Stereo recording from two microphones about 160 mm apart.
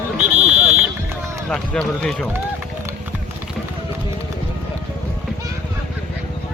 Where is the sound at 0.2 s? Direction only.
10° right (ahead or behind).